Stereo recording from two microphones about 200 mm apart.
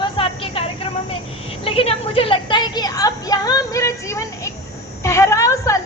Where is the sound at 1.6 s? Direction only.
30° left (ahead or behind).